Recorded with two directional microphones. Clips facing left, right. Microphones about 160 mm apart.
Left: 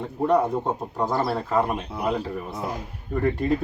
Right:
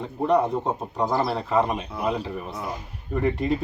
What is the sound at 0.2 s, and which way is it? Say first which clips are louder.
Speech: even; 5° left (ahead or behind).